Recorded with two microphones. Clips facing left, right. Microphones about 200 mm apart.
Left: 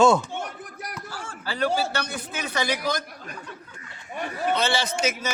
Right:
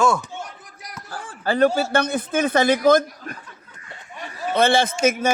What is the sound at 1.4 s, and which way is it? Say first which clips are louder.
A man's voice: right 7 dB; 50° right (ahead or behind).